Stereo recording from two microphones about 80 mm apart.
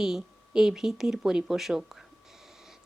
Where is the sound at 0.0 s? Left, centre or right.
Centre.